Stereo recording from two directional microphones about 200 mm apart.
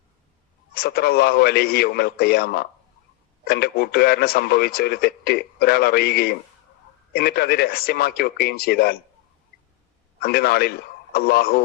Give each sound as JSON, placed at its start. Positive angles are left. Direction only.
{"t": 0.8, "sound": "speech", "side_deg": 50}
{"t": 10.2, "sound": "speech", "side_deg": 50}